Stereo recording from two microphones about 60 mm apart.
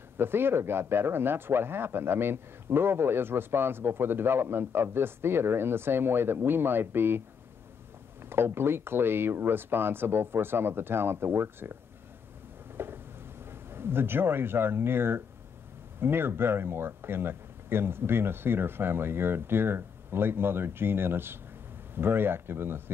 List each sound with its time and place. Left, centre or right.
0.2 s speech: right
12.7 s a sound: right
13.5 s speech: right